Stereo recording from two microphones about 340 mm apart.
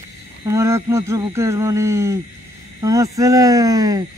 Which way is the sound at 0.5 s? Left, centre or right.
Centre.